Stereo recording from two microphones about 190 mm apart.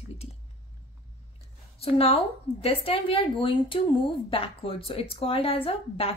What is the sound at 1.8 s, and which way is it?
A woman's voice, 30° left (ahead or behind).